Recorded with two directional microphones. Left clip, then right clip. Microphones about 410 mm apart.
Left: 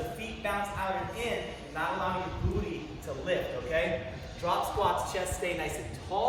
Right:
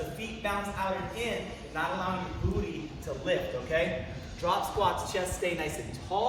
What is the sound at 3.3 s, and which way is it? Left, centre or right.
Speech, centre.